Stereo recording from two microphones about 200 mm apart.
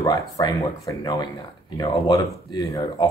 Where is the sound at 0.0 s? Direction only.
20° left (ahead or behind).